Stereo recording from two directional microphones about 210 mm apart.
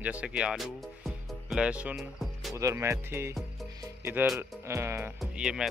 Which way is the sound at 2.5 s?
15° right (ahead or behind).